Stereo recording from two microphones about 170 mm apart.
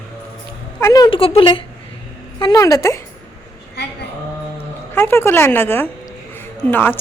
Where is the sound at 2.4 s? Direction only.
20° left (ahead or behind).